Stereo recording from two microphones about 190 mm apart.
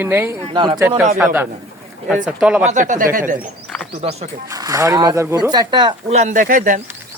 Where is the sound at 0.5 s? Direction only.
25° right (ahead or behind).